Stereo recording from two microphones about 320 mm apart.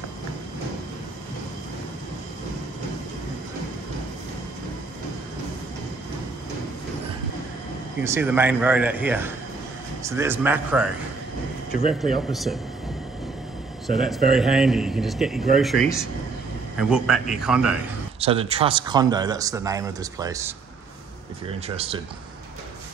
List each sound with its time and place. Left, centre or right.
8.0 s a man's voice: centre
12.3 s a man's voice: centre
13.8 s a man's voice: centre
18.2 s speech: centre
21.6 s speech: centre